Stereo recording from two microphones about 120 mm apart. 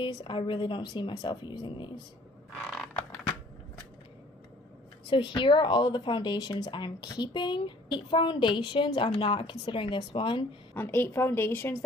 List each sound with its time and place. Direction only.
0.0 s speech: 40° left (ahead or behind)
5.1 s speech: 45° left (ahead or behind)
10.7 s a woman's voice: 15° left (ahead or behind)